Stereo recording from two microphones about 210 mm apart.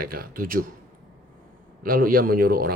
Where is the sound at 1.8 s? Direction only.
45° right (ahead or behind).